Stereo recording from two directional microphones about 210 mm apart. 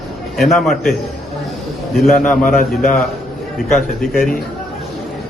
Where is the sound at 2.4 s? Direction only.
40° left (ahead or behind).